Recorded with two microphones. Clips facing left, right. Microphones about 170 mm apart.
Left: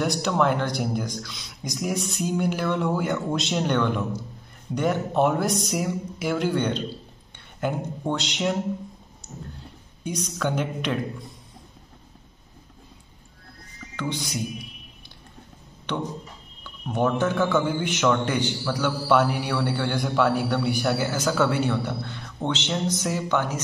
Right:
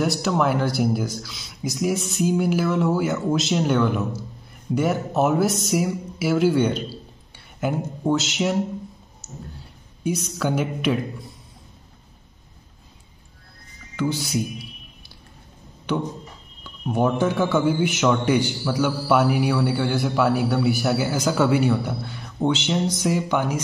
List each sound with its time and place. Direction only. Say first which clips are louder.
0.0 s speech: right 1 dB; 5° right (ahead or behind)
9.2 s a sound: right 1 dB; 5° right (ahead or behind)
10.0 s a man's voice: right 3 dB; 5° right (ahead or behind)
13.9 s a man's voice: right 5 dB; 5° right (ahead or behind)
16.6 s a man's voice: right 2 dB; 10° right (ahead or behind)